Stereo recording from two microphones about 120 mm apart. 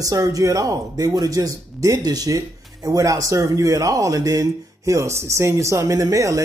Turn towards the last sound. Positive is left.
turn(degrees=-25)  # may be behind; listen again after turning